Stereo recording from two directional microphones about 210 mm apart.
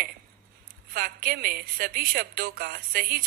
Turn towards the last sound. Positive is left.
turn(degrees=-45)  # may be behind; listen again after turning